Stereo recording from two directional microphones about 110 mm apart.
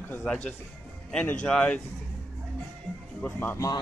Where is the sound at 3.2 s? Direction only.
15° left (ahead or behind).